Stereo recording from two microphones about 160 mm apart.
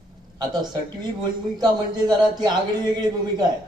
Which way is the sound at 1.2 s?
25° right (ahead or behind).